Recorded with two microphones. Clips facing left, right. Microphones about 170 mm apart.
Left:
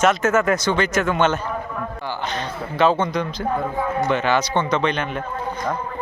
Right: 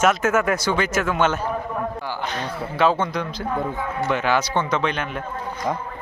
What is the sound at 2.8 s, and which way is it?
Speech, 10° right (ahead or behind).